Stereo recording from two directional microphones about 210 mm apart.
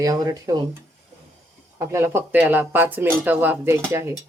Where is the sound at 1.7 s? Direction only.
10° right (ahead or behind).